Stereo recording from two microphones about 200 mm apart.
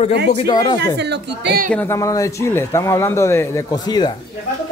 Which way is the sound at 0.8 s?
55° right (ahead or behind).